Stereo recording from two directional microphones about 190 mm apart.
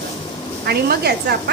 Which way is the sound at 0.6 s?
55° right (ahead or behind).